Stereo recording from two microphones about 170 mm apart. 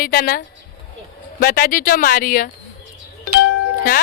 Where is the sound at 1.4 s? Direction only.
60° left (ahead or behind).